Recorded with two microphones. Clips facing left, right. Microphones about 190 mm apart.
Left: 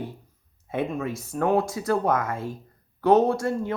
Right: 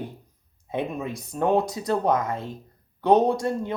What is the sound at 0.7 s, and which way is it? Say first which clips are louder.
Speech: left 1 dB; 15° right (ahead or behind).